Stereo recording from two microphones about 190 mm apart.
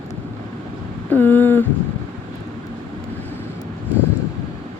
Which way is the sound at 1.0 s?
10° left (ahead or behind).